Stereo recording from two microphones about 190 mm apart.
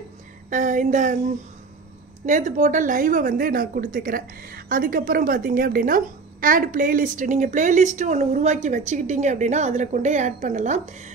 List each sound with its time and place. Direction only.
0.5 s speech: 40° right (ahead or behind)
2.2 s speech: 40° right (ahead or behind)